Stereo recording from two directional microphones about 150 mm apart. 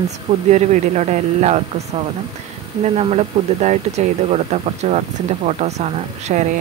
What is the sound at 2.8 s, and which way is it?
Speech, 45° right (ahead or behind).